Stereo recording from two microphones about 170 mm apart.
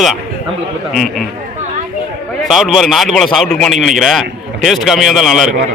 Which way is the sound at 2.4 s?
Centre (ahead or behind).